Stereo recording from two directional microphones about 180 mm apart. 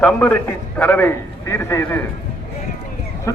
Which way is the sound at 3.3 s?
20° left (ahead or behind).